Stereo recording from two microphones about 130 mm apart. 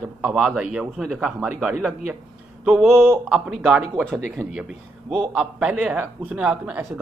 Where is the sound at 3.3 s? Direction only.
5° right (ahead or behind).